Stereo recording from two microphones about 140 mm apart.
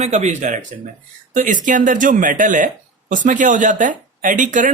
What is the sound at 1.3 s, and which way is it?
Speech, 65° right (ahead or behind).